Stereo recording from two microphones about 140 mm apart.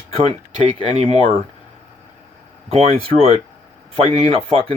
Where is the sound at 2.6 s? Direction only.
45° right (ahead or behind).